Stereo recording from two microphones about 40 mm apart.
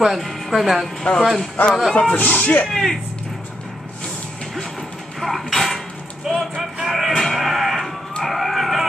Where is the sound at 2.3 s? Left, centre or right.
Left.